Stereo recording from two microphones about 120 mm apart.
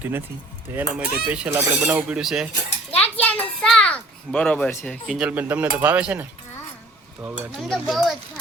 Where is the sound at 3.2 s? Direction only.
10° left (ahead or behind).